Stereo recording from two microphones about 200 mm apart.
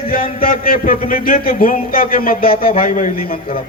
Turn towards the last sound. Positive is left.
turn(degrees=45)  # may be behind; listen again after turning